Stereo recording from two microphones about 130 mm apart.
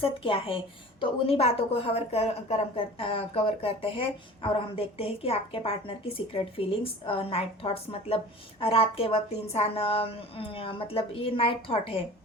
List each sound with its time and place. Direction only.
0.0 s a woman's voice: 45° left (ahead or behind)